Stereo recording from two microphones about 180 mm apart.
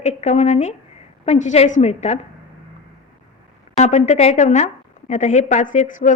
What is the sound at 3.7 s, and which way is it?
A woman's voice, 40° left (ahead or behind).